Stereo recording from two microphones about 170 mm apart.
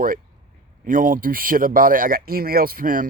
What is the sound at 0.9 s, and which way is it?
Speech, 55° right (ahead or behind).